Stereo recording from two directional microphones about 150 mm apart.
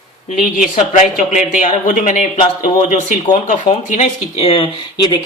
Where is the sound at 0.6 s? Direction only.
60° left (ahead or behind).